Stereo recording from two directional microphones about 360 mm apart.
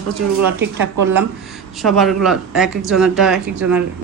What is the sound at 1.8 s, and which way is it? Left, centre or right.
Speech, centre.